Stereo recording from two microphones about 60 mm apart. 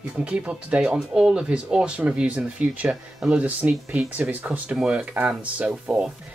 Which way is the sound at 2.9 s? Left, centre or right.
Centre.